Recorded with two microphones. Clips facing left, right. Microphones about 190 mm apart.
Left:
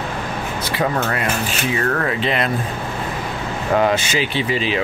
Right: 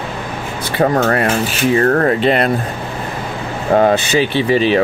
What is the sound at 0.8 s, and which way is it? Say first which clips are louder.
Speech: right 8 dB; 45° right (ahead or behind).